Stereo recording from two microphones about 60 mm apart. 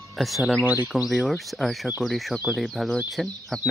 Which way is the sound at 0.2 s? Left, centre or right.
Centre.